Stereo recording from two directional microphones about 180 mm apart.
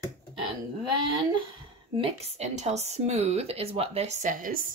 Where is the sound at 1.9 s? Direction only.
35° right (ahead or behind).